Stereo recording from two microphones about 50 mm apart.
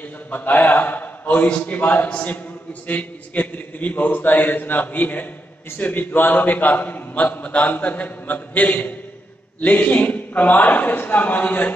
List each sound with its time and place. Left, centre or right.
0.3 s a man's voice: left